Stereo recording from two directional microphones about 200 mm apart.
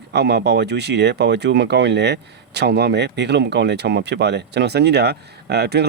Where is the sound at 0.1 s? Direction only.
55° right (ahead or behind).